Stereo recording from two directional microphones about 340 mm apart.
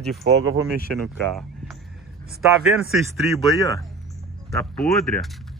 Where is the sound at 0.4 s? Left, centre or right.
Right.